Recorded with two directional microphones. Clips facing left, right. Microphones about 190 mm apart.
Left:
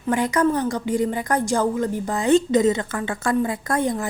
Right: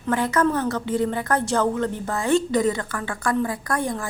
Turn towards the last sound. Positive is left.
turn(degrees=20)  # may be behind; listen again after turning